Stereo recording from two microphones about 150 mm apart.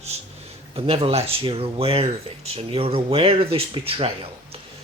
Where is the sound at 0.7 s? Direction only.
40° right (ahead or behind).